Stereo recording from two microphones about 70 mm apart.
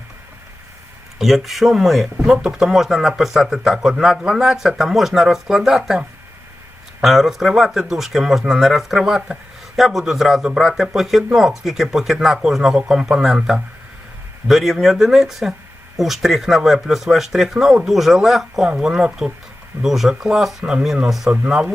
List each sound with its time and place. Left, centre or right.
1.2 s speech: centre
21.2 s speech: right